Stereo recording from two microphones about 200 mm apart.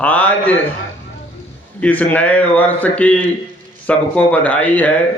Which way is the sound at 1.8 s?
5° left (ahead or behind).